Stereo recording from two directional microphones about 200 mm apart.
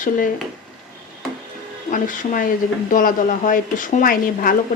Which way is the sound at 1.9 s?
40° left (ahead or behind).